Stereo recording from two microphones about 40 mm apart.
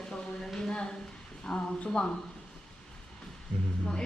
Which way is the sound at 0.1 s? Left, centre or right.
Centre.